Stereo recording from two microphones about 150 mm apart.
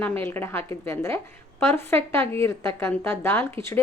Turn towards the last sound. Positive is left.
turn(degrees=15)  # may be behind; listen again after turning